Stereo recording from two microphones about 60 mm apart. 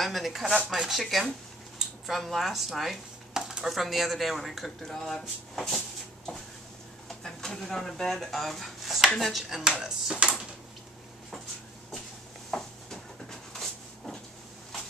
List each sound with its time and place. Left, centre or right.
0.0 s speech: centre
7.1 s speech: centre
10.1 s speech: right
12.4 s a sound: centre